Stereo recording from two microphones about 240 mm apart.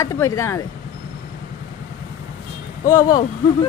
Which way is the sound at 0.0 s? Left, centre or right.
Centre.